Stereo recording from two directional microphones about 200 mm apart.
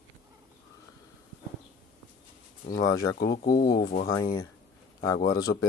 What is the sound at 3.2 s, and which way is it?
Speech, 50° left (ahead or behind).